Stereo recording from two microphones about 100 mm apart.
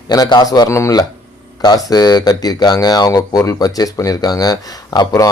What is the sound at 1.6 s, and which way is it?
Speech, 40° left (ahead or behind).